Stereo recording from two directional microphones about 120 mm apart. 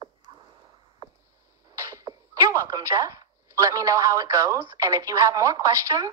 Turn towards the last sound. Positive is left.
turn(degrees=-25)  # may be behind; listen again after turning